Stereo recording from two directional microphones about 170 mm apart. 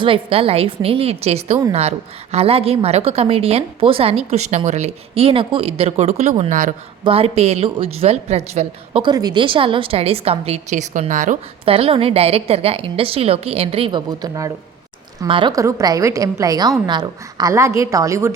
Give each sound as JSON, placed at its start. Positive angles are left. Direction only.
{"t": 0.0, "sound": "a woman's voice", "side_deg": -35}
{"t": 6.5, "sound": "speech", "side_deg": -50}
{"t": 7.0, "sound": "a woman's voice", "side_deg": -35}
{"t": 11.6, "sound": "a woman's voice", "side_deg": -35}